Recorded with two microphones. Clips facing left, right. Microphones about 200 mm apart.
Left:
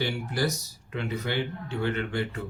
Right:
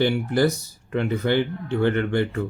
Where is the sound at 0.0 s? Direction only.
55° right (ahead or behind).